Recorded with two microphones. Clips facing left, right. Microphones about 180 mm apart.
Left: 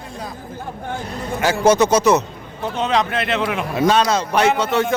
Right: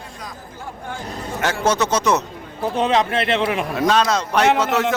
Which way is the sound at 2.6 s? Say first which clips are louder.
Right 1 dB; 35° right (ahead or behind).